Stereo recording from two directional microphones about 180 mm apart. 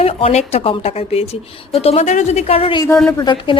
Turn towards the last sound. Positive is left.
turn(degrees=25)  # may be behind; listen again after turning